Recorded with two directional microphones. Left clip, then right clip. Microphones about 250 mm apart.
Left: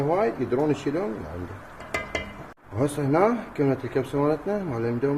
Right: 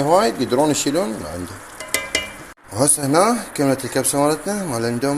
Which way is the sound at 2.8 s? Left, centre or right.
Centre.